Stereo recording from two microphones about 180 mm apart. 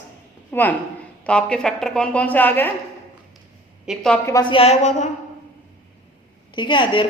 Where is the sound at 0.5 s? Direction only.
10° left (ahead or behind).